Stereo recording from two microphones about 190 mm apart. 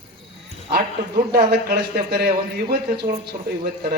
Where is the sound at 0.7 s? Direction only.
55° right (ahead or behind).